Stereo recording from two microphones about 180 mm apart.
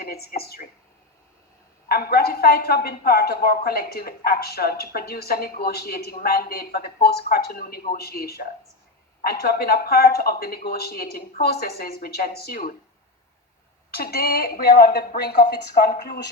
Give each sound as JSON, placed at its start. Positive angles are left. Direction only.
{"t": 0.0, "sound": "speech", "side_deg": 60}
{"t": 1.9, "sound": "speech", "side_deg": 60}
{"t": 13.9, "sound": "speech", "side_deg": 60}